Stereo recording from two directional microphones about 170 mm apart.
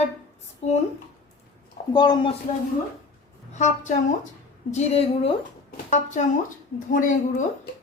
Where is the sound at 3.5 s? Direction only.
45° left (ahead or behind).